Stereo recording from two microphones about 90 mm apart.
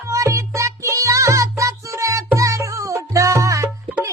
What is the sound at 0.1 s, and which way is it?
Music, 35° right (ahead or behind).